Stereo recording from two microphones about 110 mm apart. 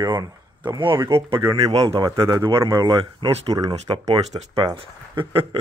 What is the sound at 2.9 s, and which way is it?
Speech, 45° right (ahead or behind).